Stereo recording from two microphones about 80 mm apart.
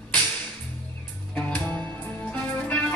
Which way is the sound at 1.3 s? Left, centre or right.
Centre.